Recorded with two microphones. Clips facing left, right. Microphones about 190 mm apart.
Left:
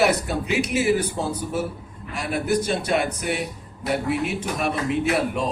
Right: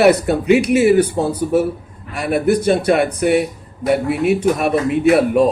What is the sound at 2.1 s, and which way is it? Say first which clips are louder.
A man's voice: right 7 dB; 60° right (ahead or behind).